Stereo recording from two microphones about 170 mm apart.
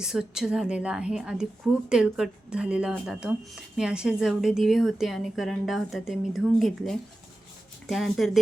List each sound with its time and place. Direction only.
0.0 s speech: 5° right (ahead or behind)